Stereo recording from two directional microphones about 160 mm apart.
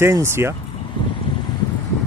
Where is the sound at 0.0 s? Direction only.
15° right (ahead or behind).